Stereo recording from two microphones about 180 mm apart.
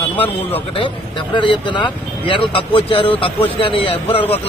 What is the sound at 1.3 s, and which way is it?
A man's voice, 25° left (ahead or behind).